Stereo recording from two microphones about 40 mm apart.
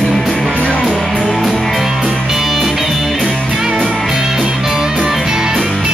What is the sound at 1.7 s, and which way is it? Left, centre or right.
Music, centre.